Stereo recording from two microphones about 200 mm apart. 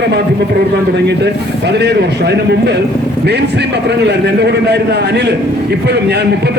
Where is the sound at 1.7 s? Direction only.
55° right (ahead or behind).